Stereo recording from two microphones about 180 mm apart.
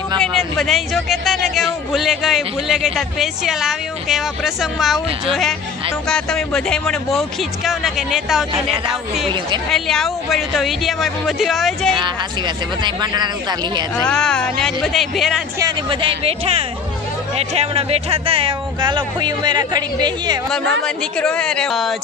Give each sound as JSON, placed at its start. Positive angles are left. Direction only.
{"t": 0.2, "sound": "speech", "side_deg": 0}
{"t": 6.0, "sound": "speech", "side_deg": 5}
{"t": 12.8, "sound": "speech", "side_deg": -25}
{"t": 13.9, "sound": "speech", "side_deg": 5}
{"t": 15.6, "sound": "speech", "side_deg": -30}
{"t": 20.8, "sound": "speech", "side_deg": 5}